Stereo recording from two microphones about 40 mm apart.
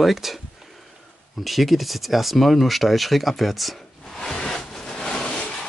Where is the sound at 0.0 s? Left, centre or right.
Centre.